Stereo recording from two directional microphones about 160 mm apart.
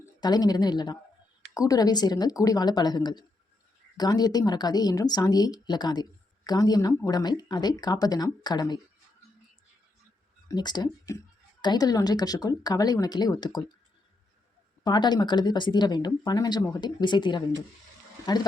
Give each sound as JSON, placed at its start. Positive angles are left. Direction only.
{"t": 0.2, "sound": "speech", "side_deg": 25}
{"t": 10.5, "sound": "speech", "side_deg": 25}
{"t": 14.8, "sound": "speech", "side_deg": 25}